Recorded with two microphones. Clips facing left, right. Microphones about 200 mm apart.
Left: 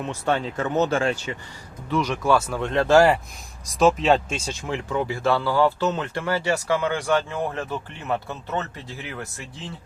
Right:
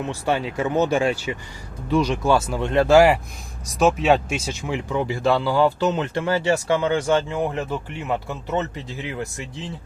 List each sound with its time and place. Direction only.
0.0 s speech: 10° right (ahead or behind)